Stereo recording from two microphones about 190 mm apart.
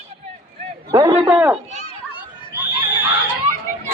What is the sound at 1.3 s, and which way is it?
Speech, 5° right (ahead or behind).